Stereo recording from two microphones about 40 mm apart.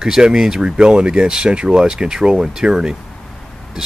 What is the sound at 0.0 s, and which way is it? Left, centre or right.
Speech, centre.